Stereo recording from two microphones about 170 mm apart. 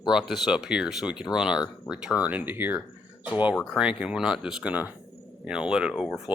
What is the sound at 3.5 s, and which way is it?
Speech, centre (ahead or behind).